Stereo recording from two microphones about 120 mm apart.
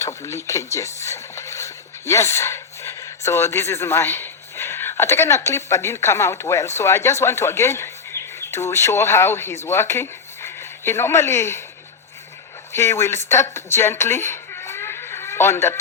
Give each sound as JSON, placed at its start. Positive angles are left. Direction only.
{"t": 0.0, "sound": "speech", "side_deg": 25}
{"t": 12.7, "sound": "speech", "side_deg": 25}